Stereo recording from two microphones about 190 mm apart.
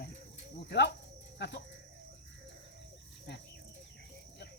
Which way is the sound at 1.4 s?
65° left (ahead or behind).